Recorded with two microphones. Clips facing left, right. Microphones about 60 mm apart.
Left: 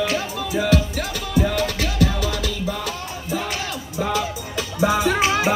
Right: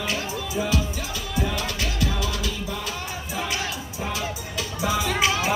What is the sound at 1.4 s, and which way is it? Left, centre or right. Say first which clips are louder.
Music: left 5 dB; left.